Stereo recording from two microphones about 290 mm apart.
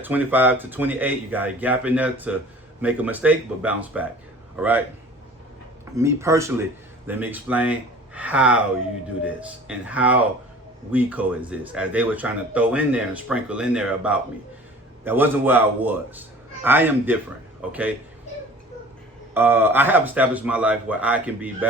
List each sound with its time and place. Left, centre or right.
0.0 s a man's voice: centre
6.0 s a man's voice: centre
19.3 s speech: centre